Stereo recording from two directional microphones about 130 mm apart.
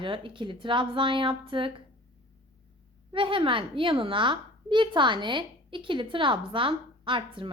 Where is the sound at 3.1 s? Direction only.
40° right (ahead or behind).